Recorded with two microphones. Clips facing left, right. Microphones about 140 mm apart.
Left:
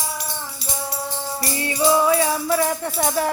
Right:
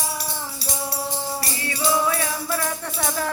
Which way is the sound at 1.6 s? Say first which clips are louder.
Left 5 dB; 20° left (ahead or behind).